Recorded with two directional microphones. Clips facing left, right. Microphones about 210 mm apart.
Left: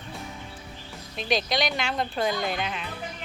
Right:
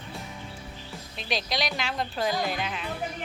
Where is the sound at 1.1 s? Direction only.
Centre (ahead or behind).